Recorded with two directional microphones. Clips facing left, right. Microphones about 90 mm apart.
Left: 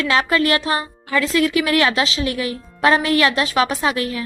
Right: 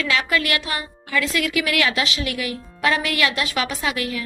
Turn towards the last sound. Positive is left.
turn(degrees=35)  # may be behind; listen again after turning